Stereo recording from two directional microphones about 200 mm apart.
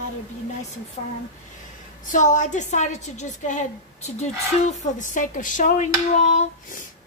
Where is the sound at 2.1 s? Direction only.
40° left (ahead or behind).